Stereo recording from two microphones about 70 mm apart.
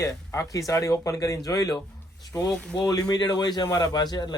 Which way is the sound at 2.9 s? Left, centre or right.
Left.